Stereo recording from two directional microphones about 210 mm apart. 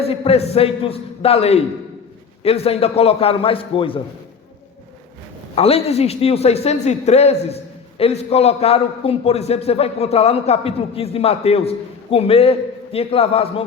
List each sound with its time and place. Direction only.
0.0 s a man's voice: 30° left (ahead or behind)
5.5 s a man's voice: 30° left (ahead or behind)